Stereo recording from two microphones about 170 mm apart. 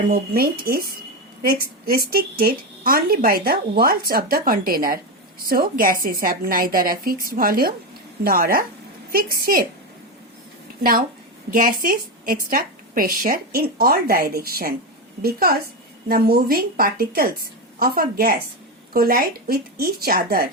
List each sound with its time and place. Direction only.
0.1 s a woman's voice: 60° right (ahead or behind)
11.5 s a woman's voice: 55° right (ahead or behind)